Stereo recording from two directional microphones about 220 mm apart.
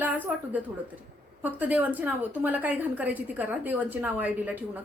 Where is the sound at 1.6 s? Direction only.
5° right (ahead or behind).